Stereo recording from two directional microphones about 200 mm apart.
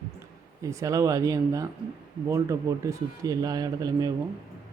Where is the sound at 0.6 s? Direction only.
15° right (ahead or behind).